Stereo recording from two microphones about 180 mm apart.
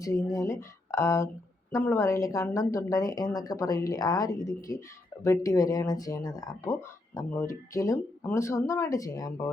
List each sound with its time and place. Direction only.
0.0 s speech: 15° left (ahead or behind)